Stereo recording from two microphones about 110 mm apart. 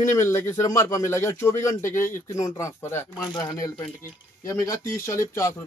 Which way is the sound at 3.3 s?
35° left (ahead or behind).